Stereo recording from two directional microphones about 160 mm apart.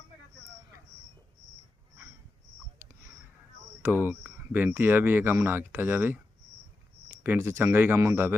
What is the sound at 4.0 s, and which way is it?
Speech, 10° right (ahead or behind).